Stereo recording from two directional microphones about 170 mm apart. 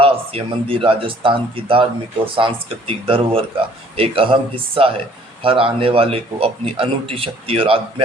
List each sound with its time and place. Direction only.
0.0 s speech: 35° right (ahead or behind)